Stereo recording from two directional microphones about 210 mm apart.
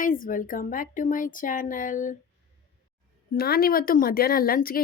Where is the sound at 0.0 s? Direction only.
40° left (ahead or behind).